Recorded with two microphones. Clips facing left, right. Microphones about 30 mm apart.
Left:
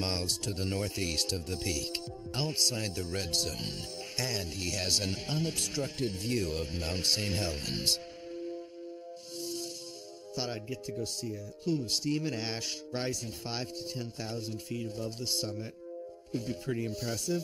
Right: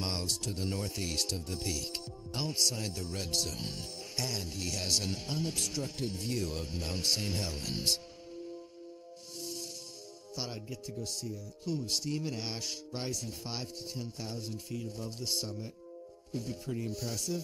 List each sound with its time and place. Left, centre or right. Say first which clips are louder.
0.0 s speech: left 2 dB; left
10.3 s speech: left 4 dB; left